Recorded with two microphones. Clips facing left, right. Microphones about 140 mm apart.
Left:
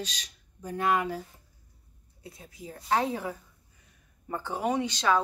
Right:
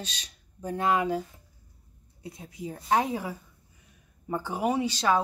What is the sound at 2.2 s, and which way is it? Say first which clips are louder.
Speech: right 6 dB; 20° right (ahead or behind).